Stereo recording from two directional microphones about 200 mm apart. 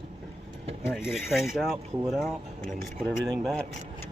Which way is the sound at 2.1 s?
Centre (ahead or behind).